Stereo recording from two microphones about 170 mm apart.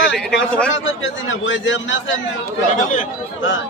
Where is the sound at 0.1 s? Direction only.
5° left (ahead or behind).